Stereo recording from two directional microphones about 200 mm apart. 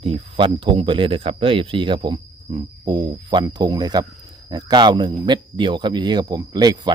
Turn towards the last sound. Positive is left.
turn(degrees=-20)  # may be behind; listen again after turning